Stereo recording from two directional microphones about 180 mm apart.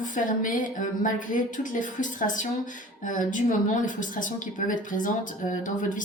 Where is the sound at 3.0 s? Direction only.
45° left (ahead or behind).